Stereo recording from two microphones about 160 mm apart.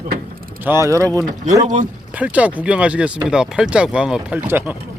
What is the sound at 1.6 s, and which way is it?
Speech, 50° right (ahead or behind).